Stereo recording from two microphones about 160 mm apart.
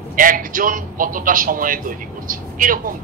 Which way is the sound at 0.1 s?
60° right (ahead or behind).